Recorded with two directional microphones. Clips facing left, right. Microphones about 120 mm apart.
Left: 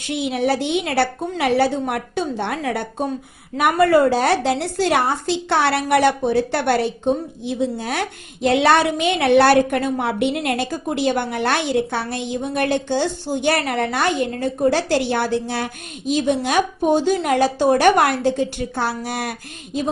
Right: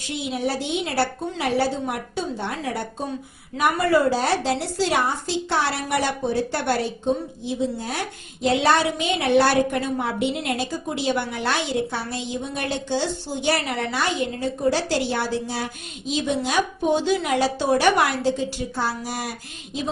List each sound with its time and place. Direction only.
0.1 s a woman's voice: 70° left (ahead or behind)